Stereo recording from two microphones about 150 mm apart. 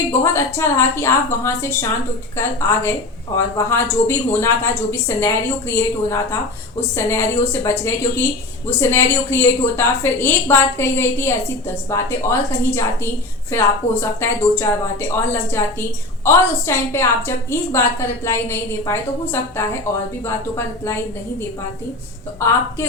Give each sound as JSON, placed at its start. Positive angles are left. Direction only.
{"t": 0.1, "sound": "a woman's voice", "side_deg": 20}
{"t": 22.4, "sound": "a woman's voice", "side_deg": 20}